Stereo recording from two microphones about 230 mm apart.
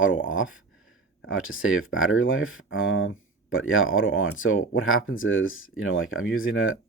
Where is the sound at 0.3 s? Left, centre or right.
Left.